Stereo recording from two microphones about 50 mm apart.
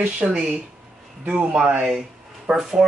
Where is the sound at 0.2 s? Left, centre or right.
Centre.